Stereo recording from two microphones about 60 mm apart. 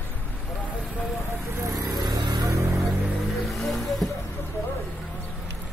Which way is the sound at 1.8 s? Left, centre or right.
Right.